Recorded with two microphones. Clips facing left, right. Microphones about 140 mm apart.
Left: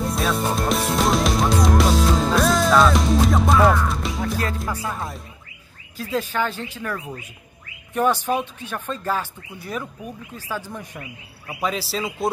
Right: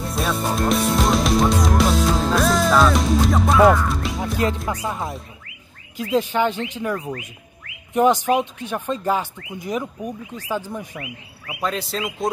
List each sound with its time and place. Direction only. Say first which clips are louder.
0.0 s music: left 1 dB; centre (ahead or behind)
5.9 s speech: right 4 dB; 15° right (ahead or behind)
7.1 s speech: right 5 dB; 80° right
7.9 s speech: right 4 dB; 15° right (ahead or behind); by 12.3 s 5° left (ahead or behind)